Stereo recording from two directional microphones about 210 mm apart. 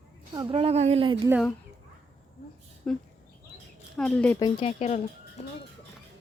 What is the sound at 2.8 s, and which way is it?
A woman's voice, 5° left (ahead or behind).